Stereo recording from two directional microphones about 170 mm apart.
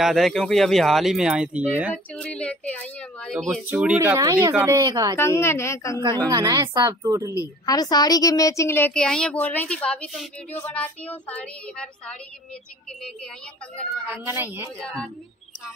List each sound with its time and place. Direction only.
0.0 s speech: centre (ahead or behind)
2.1 s a woman's voice: 5° left (ahead or behind)
3.6 s speech: 10° right (ahead or behind)
4.6 s speech: 20° right (ahead or behind)
5.1 s speech: 15° left (ahead or behind)
5.9 s speech: 20° right (ahead or behind)
7.3 s speech: 20° left (ahead or behind); by 12.2 s 5° left (ahead or behind)
14.2 s speech: 10° right (ahead or behind)
14.8 s speech: 5° left (ahead or behind)